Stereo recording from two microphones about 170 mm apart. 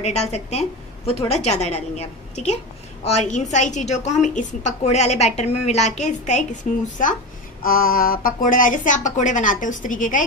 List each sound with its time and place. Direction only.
0.0 s a woman's voice: 40° left (ahead or behind)
7.6 s a woman's voice: 60° left (ahead or behind)